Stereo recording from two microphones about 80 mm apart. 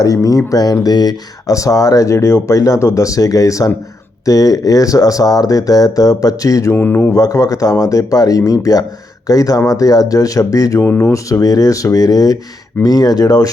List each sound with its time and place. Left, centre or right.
0.0 s speech: left
6.7 s speech: left
7.1 s speech: left
10.8 s speech: left
11.1 s speech: left